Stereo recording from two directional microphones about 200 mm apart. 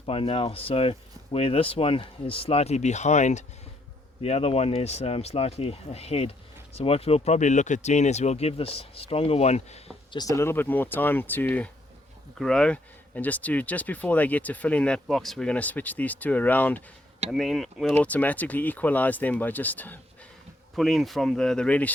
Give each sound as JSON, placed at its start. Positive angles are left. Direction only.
{"t": 0.0, "sound": "speech", "side_deg": 30}
{"t": 10.1, "sound": "speech", "side_deg": 20}